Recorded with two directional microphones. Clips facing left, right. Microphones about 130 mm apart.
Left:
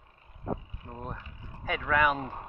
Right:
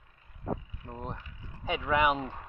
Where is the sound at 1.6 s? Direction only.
20° right (ahead or behind).